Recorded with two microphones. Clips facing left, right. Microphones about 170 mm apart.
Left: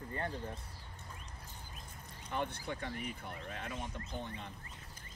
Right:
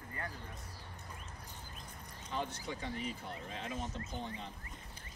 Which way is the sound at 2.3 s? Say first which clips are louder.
Left 1 dB; 60° left (ahead or behind).